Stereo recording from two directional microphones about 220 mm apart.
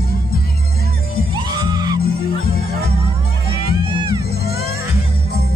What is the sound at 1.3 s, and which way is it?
Music, 20° right (ahead or behind).